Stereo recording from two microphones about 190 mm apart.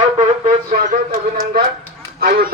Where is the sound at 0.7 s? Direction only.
50° right (ahead or behind).